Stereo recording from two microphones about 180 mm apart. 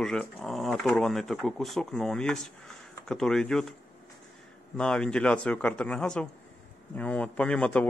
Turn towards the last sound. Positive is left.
turn(degrees=5)  # may be behind; listen again after turning